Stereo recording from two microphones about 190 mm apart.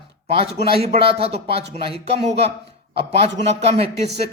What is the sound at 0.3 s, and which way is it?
Speech, 30° right (ahead or behind).